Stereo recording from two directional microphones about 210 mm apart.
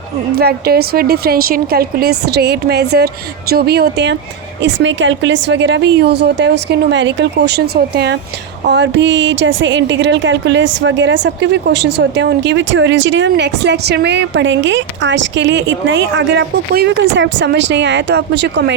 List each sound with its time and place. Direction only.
0.3 s a woman's voice: 50° right (ahead or behind)